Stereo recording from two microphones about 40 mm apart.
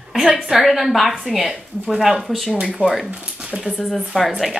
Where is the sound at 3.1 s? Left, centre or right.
Right.